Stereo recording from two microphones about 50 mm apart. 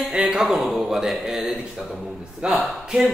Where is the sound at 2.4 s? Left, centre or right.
Right.